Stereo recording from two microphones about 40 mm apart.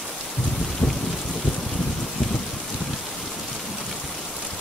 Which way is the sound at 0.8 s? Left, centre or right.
Left.